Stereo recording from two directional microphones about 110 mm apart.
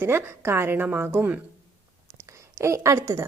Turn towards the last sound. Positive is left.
turn(degrees=-25)  # may be behind; listen again after turning